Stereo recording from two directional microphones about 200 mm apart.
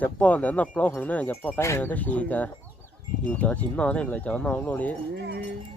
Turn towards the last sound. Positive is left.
turn(degrees=-60)  # may be behind; listen again after turning